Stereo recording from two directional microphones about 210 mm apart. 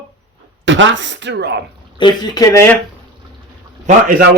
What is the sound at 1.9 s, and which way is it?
Speech, 20° left (ahead or behind).